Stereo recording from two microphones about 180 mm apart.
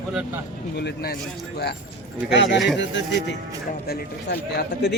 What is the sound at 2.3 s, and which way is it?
Speech, 75° left (ahead or behind).